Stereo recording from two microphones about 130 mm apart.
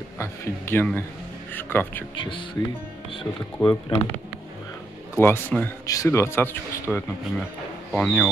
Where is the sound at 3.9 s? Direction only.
40° left (ahead or behind).